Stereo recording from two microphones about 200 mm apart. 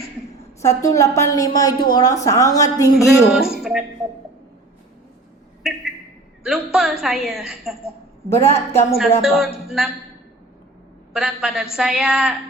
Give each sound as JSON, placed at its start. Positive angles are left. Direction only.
{"t": 0.6, "sound": "a woman's voice", "side_deg": 15}
{"t": 3.3, "sound": "speech", "side_deg": 0}
{"t": 6.4, "sound": "speech", "side_deg": 0}
{"t": 8.3, "sound": "a woman's voice", "side_deg": 10}
{"t": 9.0, "sound": "speech", "side_deg": 0}
{"t": 11.1, "sound": "speech", "side_deg": 0}